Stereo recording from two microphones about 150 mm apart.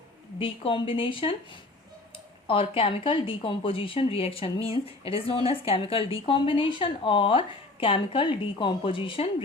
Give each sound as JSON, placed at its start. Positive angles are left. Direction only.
{"t": 0.3, "sound": "speech", "side_deg": 35}